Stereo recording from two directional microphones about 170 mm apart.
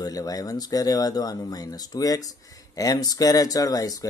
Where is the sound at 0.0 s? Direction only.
20° left (ahead or behind).